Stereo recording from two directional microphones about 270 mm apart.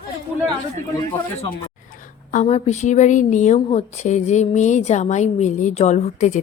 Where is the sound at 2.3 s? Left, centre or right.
Left.